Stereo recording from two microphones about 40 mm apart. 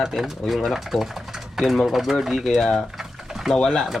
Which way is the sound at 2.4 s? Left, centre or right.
Centre.